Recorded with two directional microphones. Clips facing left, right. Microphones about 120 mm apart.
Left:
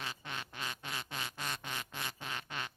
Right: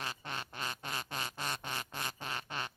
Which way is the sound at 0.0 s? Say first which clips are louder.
Right 2 dB; 40° right (ahead or behind).